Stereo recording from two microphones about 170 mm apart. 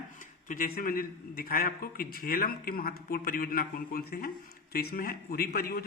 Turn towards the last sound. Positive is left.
turn(degrees=60)  # may be behind; listen again after turning